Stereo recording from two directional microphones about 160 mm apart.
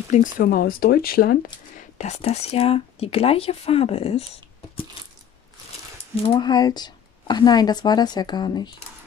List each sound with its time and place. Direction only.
0.1 s speech: 60° left (ahead or behind); by 4.2 s 40° left (ahead or behind)
6.2 s speech: 30° left (ahead or behind)